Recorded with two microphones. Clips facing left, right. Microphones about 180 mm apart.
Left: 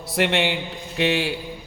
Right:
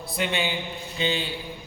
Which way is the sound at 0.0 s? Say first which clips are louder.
Left 6 dB; 80° left.